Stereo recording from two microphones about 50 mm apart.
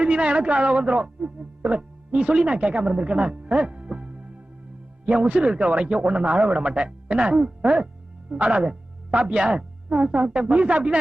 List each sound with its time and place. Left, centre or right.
0.0 s a man's voice: right